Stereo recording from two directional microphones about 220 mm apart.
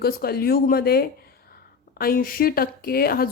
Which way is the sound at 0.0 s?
45° left (ahead or behind).